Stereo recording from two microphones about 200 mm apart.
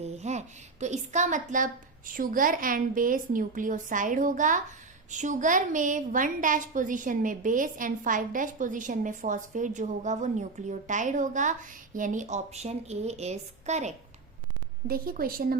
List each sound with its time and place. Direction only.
0.0 s a woman's voice: 35° right (ahead or behind)
14.8 s a woman's voice: 45° right (ahead or behind)